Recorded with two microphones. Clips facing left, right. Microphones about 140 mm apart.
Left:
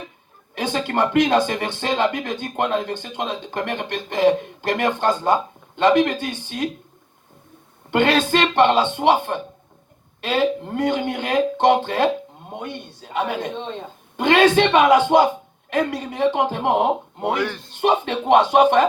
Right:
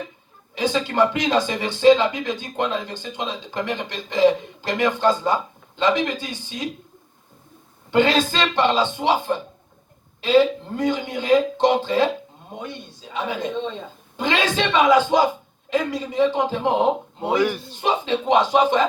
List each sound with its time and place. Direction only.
0.5 s speech: 55° left (ahead or behind)
7.9 s speech: 60° left (ahead or behind)
17.3 s a man's voice: 10° right (ahead or behind)
17.7 s speech: 60° left (ahead or behind)